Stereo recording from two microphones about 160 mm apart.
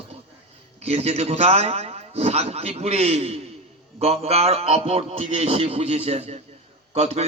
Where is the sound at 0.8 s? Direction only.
40° right (ahead or behind).